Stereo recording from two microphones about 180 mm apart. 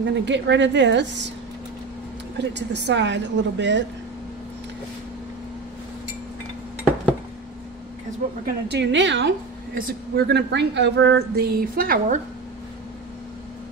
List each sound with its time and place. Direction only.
0.0 s a woman's voice: 80° right
2.3 s a woman's voice: 75° right (ahead or behind)
8.5 s a woman's voice: 65° right (ahead or behind); by 9.3 s 85° right
9.8 s a woman's voice: 55° right (ahead or behind)